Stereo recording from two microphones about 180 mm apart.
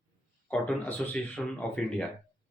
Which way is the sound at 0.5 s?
5° left (ahead or behind).